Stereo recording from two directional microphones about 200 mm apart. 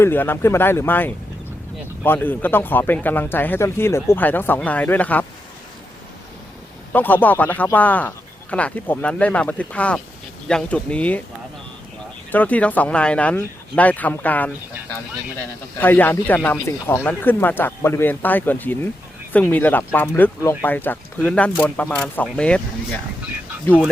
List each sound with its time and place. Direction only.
0.0 s speech: 10° left (ahead or behind)
6.9 s speech: 10° left (ahead or behind)
12.3 s speech: 10° left (ahead or behind)
15.8 s speech: 10° left (ahead or behind)